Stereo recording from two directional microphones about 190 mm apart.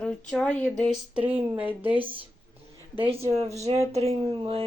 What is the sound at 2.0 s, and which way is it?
Speech, 30° right (ahead or behind).